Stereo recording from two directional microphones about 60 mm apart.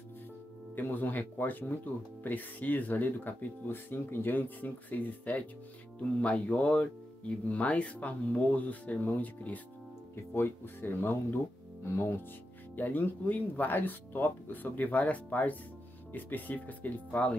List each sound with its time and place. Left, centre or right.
0.7 s speech: left
10.3 s speech: left
12.7 s speech: left